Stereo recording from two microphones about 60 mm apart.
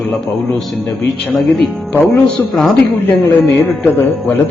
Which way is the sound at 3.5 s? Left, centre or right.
Left.